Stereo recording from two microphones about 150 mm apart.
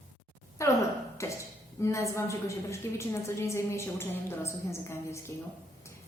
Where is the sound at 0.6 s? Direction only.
20° left (ahead or behind).